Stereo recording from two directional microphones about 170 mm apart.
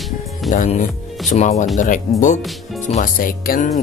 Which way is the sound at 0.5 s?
45° left (ahead or behind).